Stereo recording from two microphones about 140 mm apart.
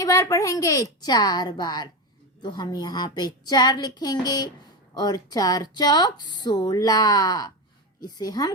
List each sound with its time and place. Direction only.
0.0 s speech: 25° left (ahead or behind)